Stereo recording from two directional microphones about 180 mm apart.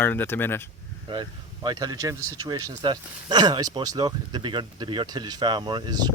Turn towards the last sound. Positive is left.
turn(degrees=-25)  # may be behind; listen again after turning